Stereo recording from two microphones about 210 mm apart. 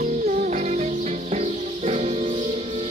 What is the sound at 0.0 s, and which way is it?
Music, 35° right (ahead or behind).